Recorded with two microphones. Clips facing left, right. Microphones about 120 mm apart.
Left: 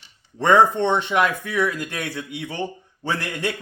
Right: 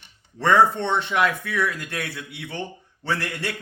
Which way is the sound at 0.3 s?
15° left (ahead or behind).